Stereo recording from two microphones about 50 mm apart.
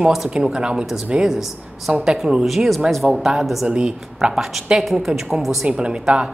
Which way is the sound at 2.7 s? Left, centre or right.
Centre.